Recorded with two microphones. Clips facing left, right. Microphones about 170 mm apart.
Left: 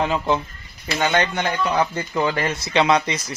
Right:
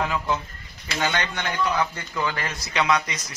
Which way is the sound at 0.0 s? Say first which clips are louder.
Left 5 dB; 25° left (ahead or behind).